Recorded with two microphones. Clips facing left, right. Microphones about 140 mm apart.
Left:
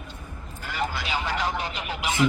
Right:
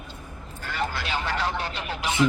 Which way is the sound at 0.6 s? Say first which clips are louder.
Even; 10° left (ahead or behind).